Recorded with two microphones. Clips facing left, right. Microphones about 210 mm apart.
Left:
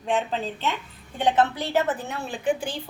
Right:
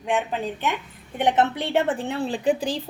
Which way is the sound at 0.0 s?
15° right (ahead or behind).